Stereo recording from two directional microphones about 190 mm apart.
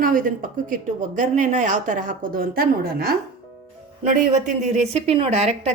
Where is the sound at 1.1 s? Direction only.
40° right (ahead or behind).